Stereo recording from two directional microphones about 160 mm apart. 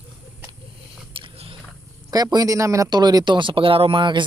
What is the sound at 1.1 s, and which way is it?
Biting, 35° right (ahead or behind).